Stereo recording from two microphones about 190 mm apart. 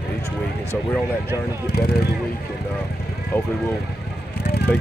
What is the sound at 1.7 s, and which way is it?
Speech, 55° left (ahead or behind).